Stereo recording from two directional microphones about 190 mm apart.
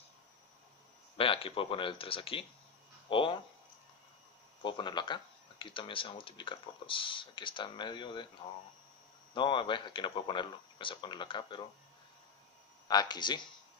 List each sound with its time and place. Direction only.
1.1 s speech: 30° left (ahead or behind)
4.6 s speech: 25° left (ahead or behind)
9.3 s speech: 25° left (ahead or behind)
12.8 s speech: 20° left (ahead or behind)